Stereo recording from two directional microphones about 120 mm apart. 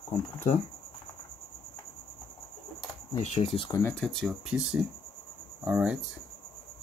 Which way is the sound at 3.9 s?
5° left (ahead or behind).